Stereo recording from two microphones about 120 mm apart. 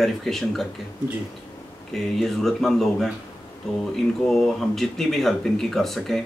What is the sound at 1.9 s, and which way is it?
Speech, centre (ahead or behind).